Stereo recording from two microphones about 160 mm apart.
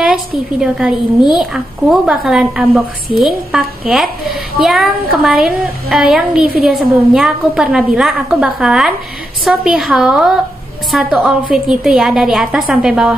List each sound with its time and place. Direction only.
0.6 s a woman's voice: 5° right (ahead or behind)